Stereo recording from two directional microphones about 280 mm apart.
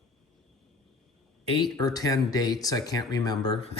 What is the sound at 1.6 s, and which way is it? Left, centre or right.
Speech, centre.